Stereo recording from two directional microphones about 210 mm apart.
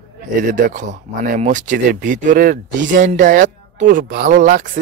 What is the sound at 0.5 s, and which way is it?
Speech, 35° right (ahead or behind).